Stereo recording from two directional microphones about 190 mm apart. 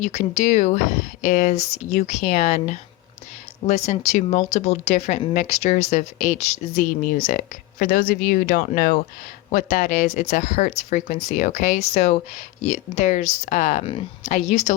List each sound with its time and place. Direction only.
0.0 s speech: 40° left (ahead or behind)